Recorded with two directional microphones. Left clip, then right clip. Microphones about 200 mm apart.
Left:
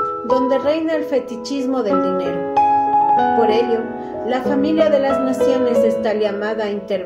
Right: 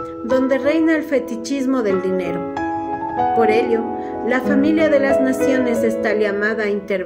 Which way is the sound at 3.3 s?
60° right (ahead or behind).